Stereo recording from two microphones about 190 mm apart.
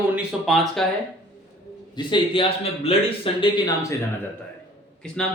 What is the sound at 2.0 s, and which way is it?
A man's voice, 25° left (ahead or behind).